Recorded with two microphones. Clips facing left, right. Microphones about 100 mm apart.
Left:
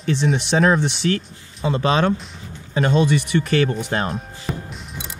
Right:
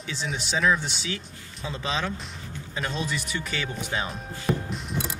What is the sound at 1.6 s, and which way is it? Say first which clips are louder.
Speech: left 11 dB; 65° left (ahead or behind).